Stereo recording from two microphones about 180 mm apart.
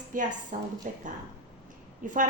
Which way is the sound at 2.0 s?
45° right (ahead or behind).